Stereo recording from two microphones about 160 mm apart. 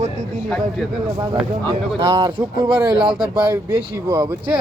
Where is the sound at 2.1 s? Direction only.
30° right (ahead or behind).